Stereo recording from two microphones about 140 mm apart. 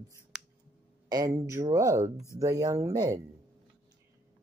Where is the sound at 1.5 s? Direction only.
20° right (ahead or behind).